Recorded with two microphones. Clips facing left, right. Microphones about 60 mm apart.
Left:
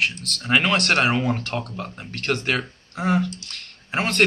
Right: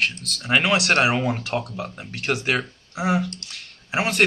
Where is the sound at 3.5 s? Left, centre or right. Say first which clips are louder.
Right 1 dB; centre.